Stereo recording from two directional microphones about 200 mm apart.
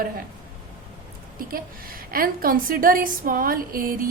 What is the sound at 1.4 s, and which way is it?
A woman's voice, 45° right (ahead or behind).